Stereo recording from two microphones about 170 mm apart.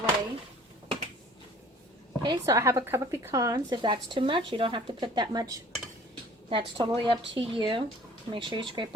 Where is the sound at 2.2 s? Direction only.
25° right (ahead or behind).